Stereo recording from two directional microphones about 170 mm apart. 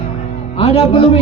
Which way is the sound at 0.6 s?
30° left (ahead or behind).